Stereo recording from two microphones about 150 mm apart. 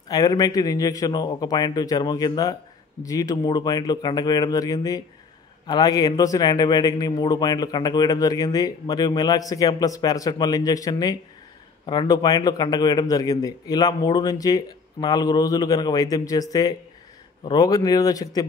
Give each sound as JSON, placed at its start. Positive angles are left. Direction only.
{"t": 0.1, "sound": "a man's voice", "side_deg": 25}